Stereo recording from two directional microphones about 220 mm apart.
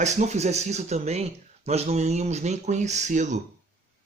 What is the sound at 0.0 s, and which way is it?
Speech, 30° right (ahead or behind).